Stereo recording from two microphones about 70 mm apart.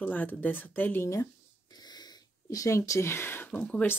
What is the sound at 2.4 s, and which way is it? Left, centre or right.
Speech, left.